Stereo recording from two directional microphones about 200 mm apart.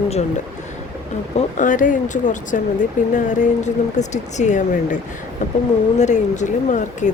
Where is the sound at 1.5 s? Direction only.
40° left (ahead or behind).